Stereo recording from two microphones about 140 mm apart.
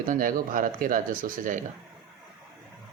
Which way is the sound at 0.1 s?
75° right (ahead or behind).